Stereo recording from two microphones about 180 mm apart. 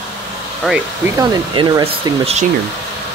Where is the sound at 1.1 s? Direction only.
25° right (ahead or behind).